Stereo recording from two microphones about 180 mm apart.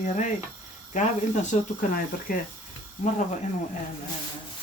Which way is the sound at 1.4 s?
50° left (ahead or behind).